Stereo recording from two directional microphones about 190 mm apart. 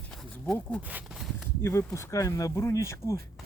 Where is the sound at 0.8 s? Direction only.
10° right (ahead or behind).